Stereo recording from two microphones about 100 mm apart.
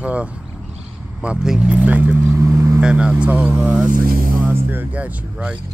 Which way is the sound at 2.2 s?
30° right (ahead or behind).